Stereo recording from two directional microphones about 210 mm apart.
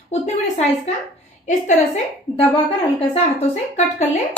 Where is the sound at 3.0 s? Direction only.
30° left (ahead or behind).